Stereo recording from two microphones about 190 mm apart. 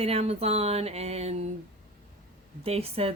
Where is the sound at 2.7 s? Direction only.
30° right (ahead or behind).